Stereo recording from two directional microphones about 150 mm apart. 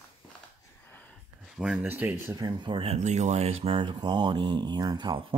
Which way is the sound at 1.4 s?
5° right (ahead or behind).